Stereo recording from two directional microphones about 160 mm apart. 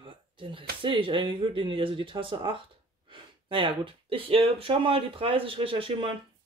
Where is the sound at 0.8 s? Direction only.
30° right (ahead or behind).